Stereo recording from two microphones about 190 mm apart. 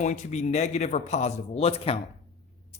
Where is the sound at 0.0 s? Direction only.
40° left (ahead or behind).